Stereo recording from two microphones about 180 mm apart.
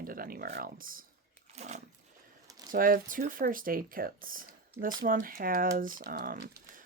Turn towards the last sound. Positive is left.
turn(degrees=-50)  # may be behind; listen again after turning